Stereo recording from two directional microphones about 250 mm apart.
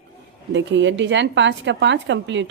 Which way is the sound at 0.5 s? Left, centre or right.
Right.